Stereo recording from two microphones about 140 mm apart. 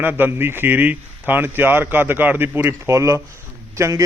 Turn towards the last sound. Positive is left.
turn(degrees=-20)  # may be behind; listen again after turning